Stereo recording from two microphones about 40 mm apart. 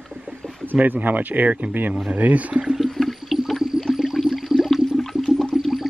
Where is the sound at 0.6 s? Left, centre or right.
Right.